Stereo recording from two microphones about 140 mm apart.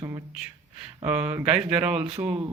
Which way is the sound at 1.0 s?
15° right (ahead or behind).